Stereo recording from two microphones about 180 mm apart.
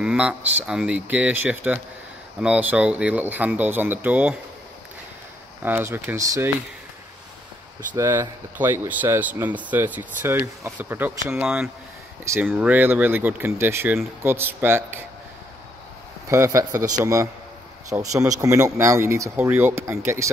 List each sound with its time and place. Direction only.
0.0 s speech: 5° right (ahead or behind)
5.6 s speech: 10° right (ahead or behind)
7.9 s speech: 15° right (ahead or behind)
16.3 s speech: 15° right (ahead or behind)